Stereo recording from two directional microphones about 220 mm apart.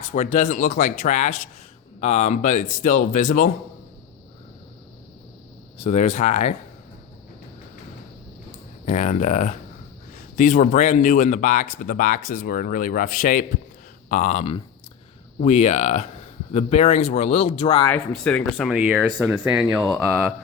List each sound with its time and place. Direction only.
0.1 s a man's voice: 30° left (ahead or behind)
5.8 s a man's voice: 30° left (ahead or behind)
8.9 s a man's voice: 30° left (ahead or behind)
17.8 s speech: 5° left (ahead or behind)